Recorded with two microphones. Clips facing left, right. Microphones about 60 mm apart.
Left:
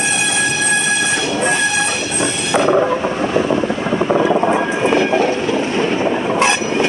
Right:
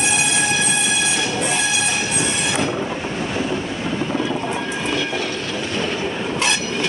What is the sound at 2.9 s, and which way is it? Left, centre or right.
Vehicle, left.